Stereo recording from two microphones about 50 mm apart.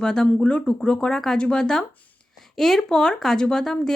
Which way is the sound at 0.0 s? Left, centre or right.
Centre.